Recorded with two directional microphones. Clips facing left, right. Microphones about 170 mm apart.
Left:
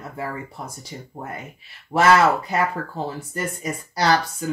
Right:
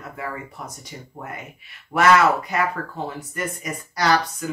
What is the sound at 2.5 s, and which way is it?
Speech, 30° left (ahead or behind).